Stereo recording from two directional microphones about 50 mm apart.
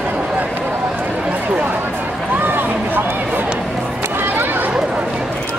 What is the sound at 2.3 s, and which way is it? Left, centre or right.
Run, right.